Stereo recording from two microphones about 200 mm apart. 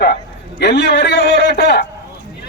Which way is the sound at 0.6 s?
55° left (ahead or behind).